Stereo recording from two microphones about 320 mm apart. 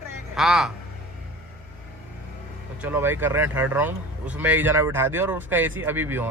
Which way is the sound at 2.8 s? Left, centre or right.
Centre.